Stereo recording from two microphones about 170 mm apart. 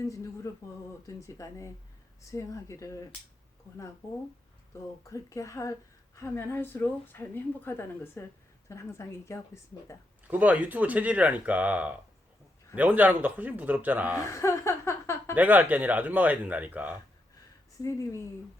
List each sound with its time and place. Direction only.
1.0 s a woman's voice: 20° left (ahead or behind)
5.0 s a woman's voice: 20° left (ahead or behind)
10.2 s speech: 10° right (ahead or behind)
14.2 s speech: 15° left (ahead or behind)
15.4 s speech: 10° right (ahead or behind)